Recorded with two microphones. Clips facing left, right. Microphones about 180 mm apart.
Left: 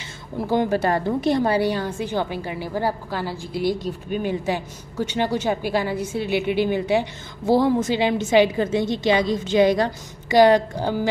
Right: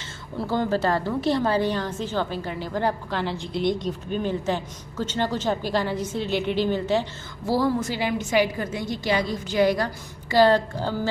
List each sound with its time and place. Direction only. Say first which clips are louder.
0.4 s a woman's voice: left 3 dB; 15° left (ahead or behind)